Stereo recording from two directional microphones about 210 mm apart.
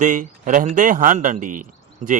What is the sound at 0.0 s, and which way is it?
A man's voice, 40° right (ahead or behind).